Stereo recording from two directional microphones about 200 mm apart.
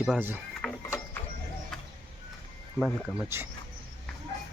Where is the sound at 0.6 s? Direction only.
Centre (ahead or behind).